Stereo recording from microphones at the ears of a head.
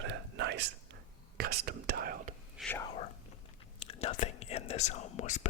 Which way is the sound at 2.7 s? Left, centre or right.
Left.